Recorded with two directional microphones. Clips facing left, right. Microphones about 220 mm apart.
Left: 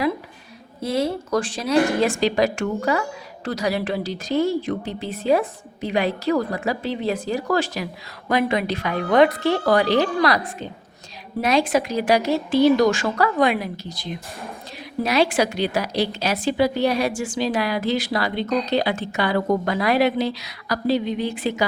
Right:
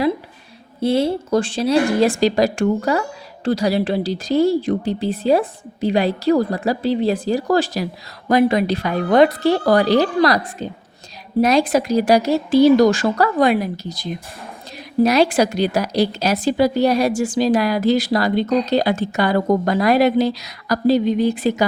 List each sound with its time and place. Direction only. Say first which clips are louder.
0.8 s a woman's voice: right 5 dB; 30° right (ahead or behind)